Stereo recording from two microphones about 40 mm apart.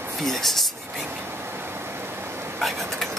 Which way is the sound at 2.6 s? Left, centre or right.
Centre.